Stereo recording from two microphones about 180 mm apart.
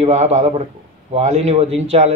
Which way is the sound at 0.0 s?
40° right (ahead or behind).